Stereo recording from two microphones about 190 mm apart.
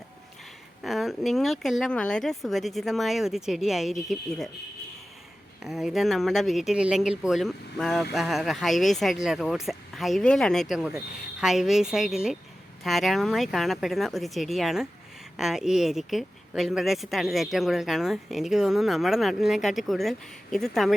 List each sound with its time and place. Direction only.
0.8 s speech: centre (ahead or behind)
5.6 s speech: centre (ahead or behind)